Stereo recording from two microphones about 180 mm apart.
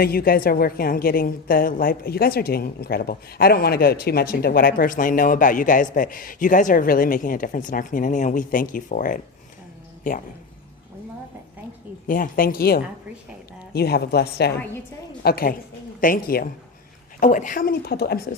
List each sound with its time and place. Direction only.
0.0 s a woman's voice: 55° left (ahead or behind)
12.0 s a woman's voice: 50° left (ahead or behind)